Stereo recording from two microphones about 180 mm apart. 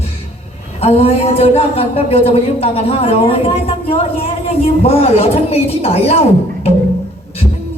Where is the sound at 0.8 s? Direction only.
35° left (ahead or behind).